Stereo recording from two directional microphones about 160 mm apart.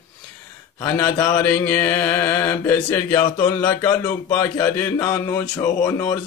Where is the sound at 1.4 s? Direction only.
10° left (ahead or behind).